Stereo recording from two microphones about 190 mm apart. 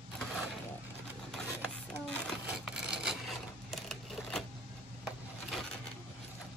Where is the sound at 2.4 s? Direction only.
5° right (ahead or behind).